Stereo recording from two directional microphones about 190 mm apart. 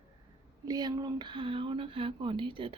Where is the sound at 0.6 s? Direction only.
20° right (ahead or behind).